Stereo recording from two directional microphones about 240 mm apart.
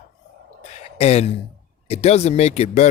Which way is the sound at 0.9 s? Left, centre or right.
Left.